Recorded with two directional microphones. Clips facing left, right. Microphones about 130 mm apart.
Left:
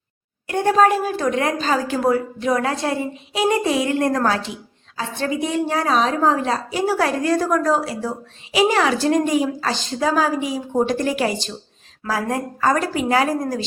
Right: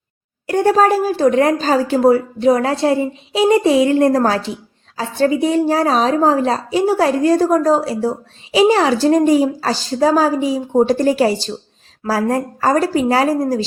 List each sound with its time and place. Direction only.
0.4 s a woman's voice: 40° right (ahead or behind)